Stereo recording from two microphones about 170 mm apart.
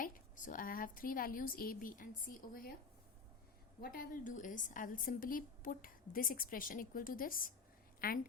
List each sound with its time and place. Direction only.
0.0 s a woman's voice: 50° left (ahead or behind)
3.8 s a woman's voice: 60° left (ahead or behind)